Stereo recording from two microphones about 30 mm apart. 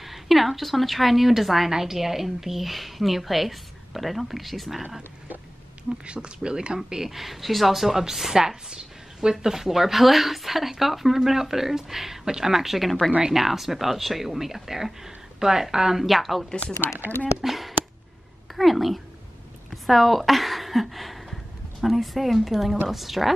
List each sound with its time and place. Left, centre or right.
0.0 s a woman's voice: centre
6.0 s speech: right
7.1 s a woman's voice: centre
16.1 s a woman's voice: centre
17.4 s a sound: centre
18.6 s a woman's voice: centre